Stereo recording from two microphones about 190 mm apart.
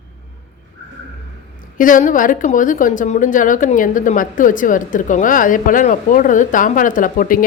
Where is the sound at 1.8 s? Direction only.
45° left (ahead or behind).